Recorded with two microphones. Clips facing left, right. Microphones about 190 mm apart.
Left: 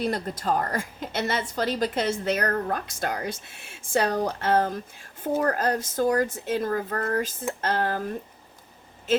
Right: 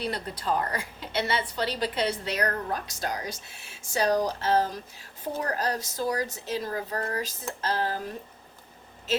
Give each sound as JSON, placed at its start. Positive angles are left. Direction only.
{"t": 0.0, "sound": "a woman's voice", "side_deg": 45}